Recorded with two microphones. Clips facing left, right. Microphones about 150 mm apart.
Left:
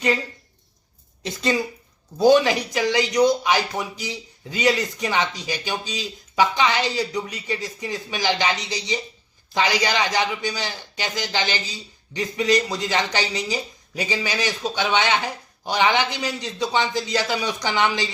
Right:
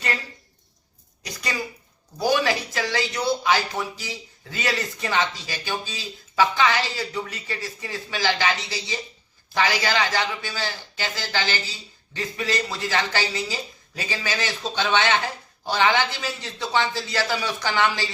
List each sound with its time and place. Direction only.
1.2 s a man's voice: 25° left (ahead or behind)